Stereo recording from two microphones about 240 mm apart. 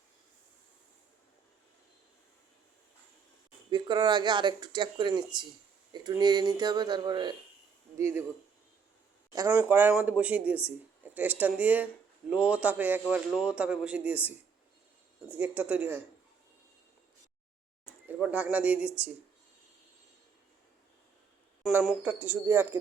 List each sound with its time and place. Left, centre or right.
3.7 s speech: centre
9.3 s speech: centre
18.1 s a man's voice: centre
21.7 s speech: centre